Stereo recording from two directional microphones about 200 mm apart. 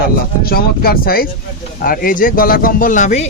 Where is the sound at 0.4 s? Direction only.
50° left (ahead or behind).